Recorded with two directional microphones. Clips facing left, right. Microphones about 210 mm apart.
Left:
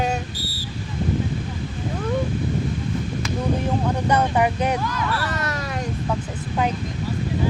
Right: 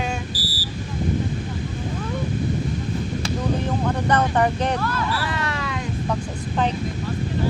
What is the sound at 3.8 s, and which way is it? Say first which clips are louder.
Speech: right 1 dB; 10° left (ahead or behind).